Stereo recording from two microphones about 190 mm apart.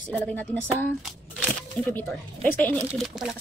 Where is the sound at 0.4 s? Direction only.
10° left (ahead or behind).